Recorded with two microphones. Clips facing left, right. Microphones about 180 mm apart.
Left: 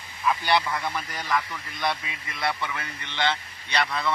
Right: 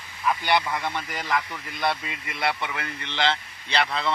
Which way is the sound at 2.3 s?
25° right (ahead or behind).